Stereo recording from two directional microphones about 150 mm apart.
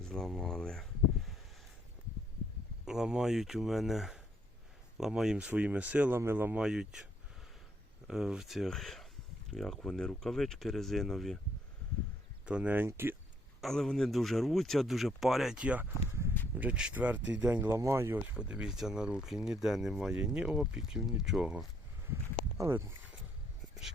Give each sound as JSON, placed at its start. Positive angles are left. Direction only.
{"t": 0.0, "sound": "a sound", "side_deg": 5}
{"t": 2.8, "sound": "speech", "side_deg": -5}
{"t": 8.0, "sound": "speech", "side_deg": -5}
{"t": 12.5, "sound": "speech", "side_deg": -10}
{"t": 13.6, "sound": "speech", "side_deg": 0}
{"t": 18.3, "sound": "speech", "side_deg": -5}
{"t": 22.1, "sound": "speech", "side_deg": -15}